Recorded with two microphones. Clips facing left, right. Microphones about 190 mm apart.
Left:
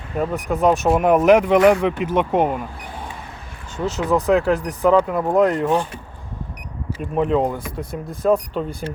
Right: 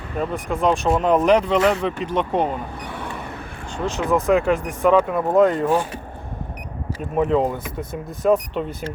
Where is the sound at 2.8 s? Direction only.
65° right (ahead or behind).